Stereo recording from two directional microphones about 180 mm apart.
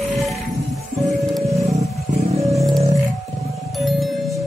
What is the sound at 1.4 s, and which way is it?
Music, 15° right (ahead or behind).